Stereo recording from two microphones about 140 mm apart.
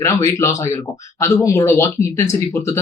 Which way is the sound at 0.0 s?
20° left (ahead or behind).